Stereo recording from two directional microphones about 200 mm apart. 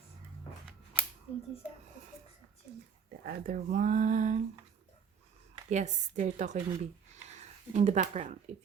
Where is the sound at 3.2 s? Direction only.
50° right (ahead or behind).